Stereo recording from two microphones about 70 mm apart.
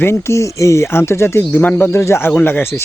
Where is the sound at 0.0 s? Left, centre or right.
Left.